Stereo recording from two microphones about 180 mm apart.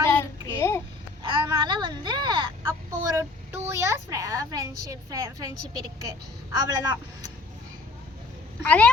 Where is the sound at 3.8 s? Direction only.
15° right (ahead or behind).